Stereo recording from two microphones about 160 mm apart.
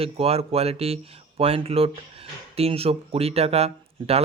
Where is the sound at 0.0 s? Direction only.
40° right (ahead or behind).